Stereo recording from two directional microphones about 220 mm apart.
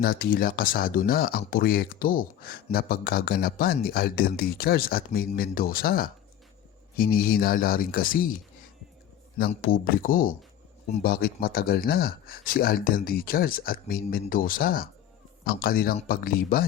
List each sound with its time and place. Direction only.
0.0 s speech: 45° left (ahead or behind)
9.8 s speech: 40° left (ahead or behind)